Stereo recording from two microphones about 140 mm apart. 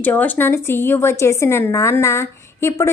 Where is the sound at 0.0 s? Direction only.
10° left (ahead or behind).